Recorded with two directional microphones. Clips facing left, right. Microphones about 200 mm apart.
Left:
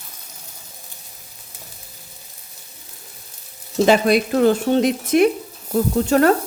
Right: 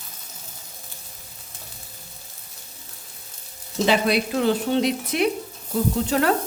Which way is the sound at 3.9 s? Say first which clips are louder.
Left 5 dB; 45° left (ahead or behind).